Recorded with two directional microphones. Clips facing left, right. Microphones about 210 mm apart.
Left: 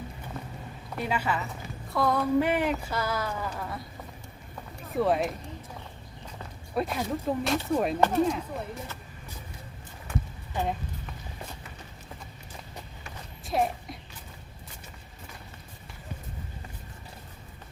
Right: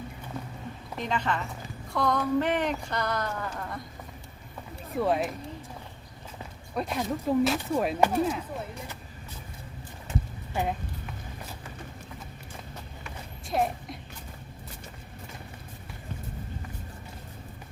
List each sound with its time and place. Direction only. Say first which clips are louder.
0.9 s a woman's voice: left 1 dB; 10° left (ahead or behind)
4.9 s speech: left 1 dB; centre (ahead or behind)
6.7 s speech: left 1 dB; centre (ahead or behind)
10.1 s clip-clop: right 1 dB; 20° right (ahead or behind)
13.5 s speech: even; centre (ahead or behind)